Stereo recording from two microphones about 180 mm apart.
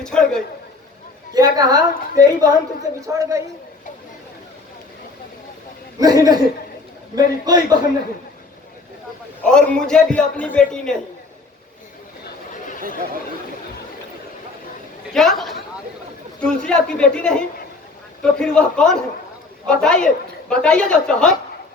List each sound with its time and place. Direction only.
0.0 s a man's voice: 5° left (ahead or behind)
1.3 s a woman's voice: 20° right (ahead or behind)
6.0 s a woman's voice: 20° right (ahead or behind)
9.4 s a man's voice: 5° left (ahead or behind)
12.5 s chatter: 45° left (ahead or behind)
15.1 s a man's voice: centre (ahead or behind)